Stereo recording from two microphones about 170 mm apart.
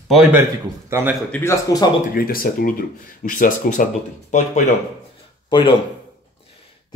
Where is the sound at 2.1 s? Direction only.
60° left (ahead or behind).